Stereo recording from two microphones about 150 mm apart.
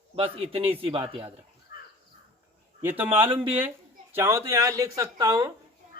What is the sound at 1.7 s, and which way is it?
Crow, 90° left.